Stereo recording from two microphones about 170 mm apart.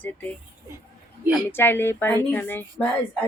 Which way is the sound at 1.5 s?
15° left (ahead or behind).